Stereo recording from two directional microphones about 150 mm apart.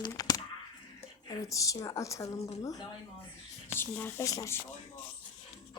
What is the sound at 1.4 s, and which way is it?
A child's voice, 20° left (ahead or behind).